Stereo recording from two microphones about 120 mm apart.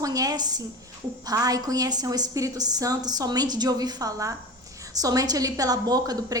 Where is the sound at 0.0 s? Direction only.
30° right (ahead or behind).